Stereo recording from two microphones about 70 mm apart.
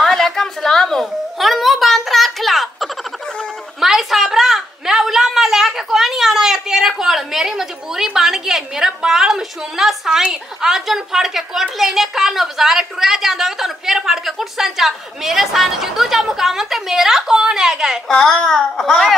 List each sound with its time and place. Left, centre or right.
0.0 s a sound: centre
10.3 s a woman's voice: centre
18.0 s speech: centre